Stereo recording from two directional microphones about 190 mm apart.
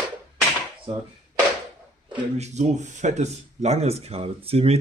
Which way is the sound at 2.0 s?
25° right (ahead or behind).